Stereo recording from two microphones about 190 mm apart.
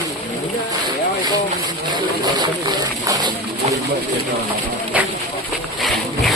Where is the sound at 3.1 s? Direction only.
20° right (ahead or behind).